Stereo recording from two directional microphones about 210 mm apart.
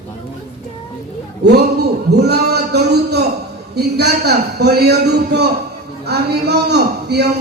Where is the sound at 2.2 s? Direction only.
50° right (ahead or behind).